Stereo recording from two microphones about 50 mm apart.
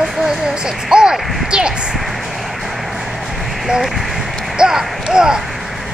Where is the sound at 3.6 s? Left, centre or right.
Centre.